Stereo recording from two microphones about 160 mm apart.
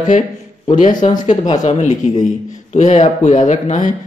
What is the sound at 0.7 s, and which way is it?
Speech, 50° left (ahead or behind).